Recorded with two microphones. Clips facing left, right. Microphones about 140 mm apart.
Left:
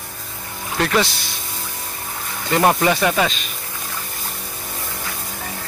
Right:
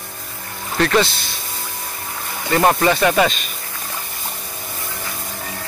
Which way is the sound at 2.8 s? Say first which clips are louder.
Right 2 dB; 10° left (ahead or behind).